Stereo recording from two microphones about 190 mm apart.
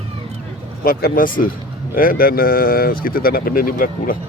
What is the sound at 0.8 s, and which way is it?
Speech, 50° left (ahead or behind).